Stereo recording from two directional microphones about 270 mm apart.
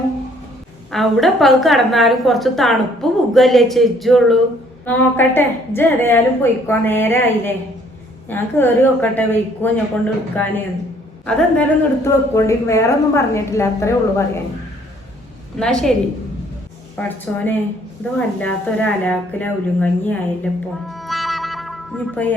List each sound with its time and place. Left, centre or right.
0.9 s a woman's voice: centre
15.5 s a woman's voice: centre
17.0 s a woman's voice: centre